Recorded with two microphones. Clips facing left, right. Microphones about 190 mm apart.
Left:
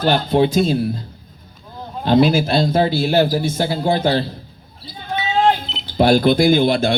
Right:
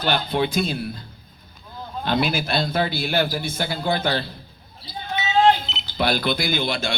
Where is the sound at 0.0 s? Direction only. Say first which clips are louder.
Left 7 dB; 45° left (ahead or behind).